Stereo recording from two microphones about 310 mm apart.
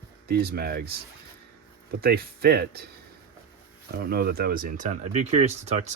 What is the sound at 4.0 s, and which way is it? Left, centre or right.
Speech, right.